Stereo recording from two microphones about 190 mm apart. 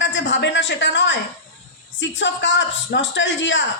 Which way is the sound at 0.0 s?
70° left (ahead or behind).